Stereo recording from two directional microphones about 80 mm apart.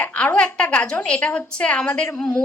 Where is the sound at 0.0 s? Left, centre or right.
Centre.